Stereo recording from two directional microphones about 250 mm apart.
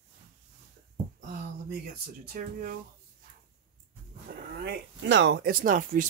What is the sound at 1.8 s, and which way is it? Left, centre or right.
Speech, right.